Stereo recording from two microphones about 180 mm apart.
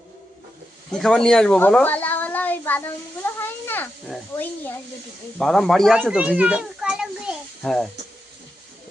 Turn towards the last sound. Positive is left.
turn(degrees=0)  # may be behind; listen again after turning